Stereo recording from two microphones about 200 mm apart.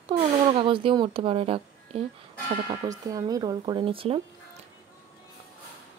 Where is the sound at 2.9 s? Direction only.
15° right (ahead or behind).